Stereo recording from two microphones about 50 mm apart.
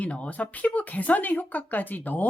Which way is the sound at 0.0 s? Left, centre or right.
Left.